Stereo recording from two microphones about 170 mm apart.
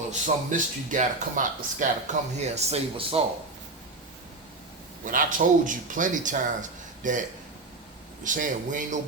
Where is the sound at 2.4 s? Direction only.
40° right (ahead or behind).